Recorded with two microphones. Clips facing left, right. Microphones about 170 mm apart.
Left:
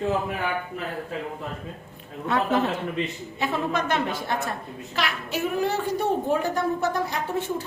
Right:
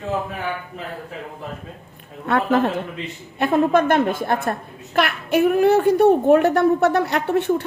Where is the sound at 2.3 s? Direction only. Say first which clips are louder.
Right 5 dB; 50° right (ahead or behind).